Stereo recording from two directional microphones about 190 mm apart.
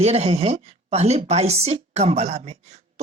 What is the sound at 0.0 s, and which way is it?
Speech, 35° right (ahead or behind).